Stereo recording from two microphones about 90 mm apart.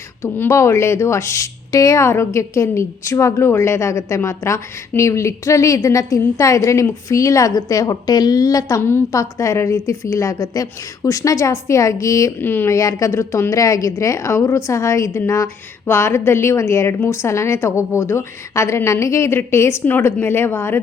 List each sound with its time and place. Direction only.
0.2 s speech: 30° left (ahead or behind)
8.8 s a woman's voice: 25° left (ahead or behind)
9.1 s speech: 35° left (ahead or behind)
12.4 s a woman's voice: 25° left (ahead or behind)
12.7 s a woman's voice: 35° left (ahead or behind)